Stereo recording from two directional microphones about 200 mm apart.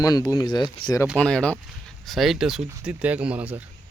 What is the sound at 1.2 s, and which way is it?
Speech, 5° left (ahead or behind).